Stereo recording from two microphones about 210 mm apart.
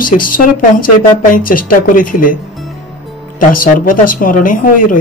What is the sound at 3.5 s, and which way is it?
A man's voice, 40° left (ahead or behind).